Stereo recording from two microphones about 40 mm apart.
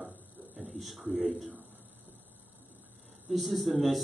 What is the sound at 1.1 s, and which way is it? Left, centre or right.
Speech, right.